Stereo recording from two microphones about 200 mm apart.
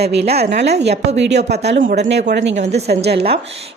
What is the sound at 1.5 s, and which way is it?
Speech, 55° right (ahead or behind).